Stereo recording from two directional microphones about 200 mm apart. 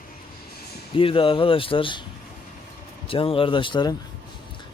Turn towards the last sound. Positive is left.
turn(degrees=20)  # may be behind; listen again after turning